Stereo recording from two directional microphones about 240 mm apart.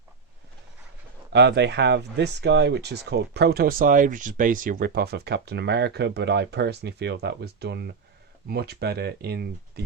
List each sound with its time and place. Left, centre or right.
1.3 s speech: right